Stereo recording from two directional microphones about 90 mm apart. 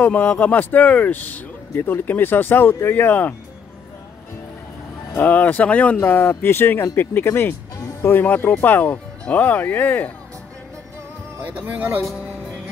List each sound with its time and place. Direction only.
0.0 s speech: 20° left (ahead or behind)
5.1 s speech: 20° left (ahead or behind)
7.7 s music: 35° left (ahead or behind)
8.1 s speech: 20° left (ahead or behind)
11.4 s speech: 20° right (ahead or behind)